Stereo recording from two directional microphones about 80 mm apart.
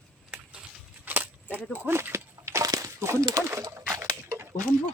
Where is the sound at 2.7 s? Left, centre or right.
Right.